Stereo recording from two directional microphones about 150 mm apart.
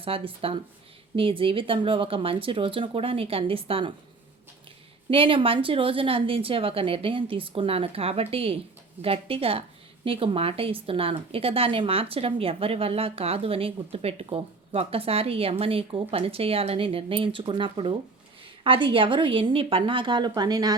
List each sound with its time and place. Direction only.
0.0 s speech: 40° right (ahead or behind)
5.1 s speech: 35° right (ahead or behind)